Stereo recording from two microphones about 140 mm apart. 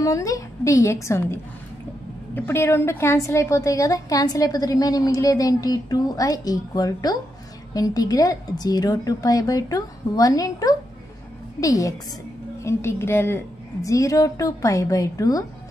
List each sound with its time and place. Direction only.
0.0 s a woman's voice: 25° left (ahead or behind)